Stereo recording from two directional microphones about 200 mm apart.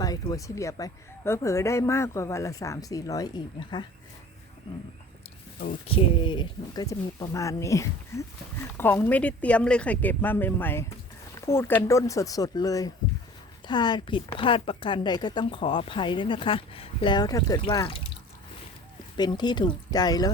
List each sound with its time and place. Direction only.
0.0 s speech: 20° left (ahead or behind)
5.9 s speech: 25° left (ahead or behind)
19.1 s speech: 20° left (ahead or behind)